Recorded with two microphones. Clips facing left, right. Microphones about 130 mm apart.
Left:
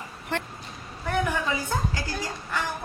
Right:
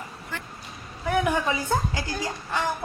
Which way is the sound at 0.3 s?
70° left (ahead or behind).